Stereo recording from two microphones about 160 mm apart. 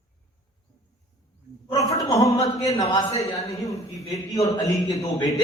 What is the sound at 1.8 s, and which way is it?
Speech, 20° left (ahead or behind).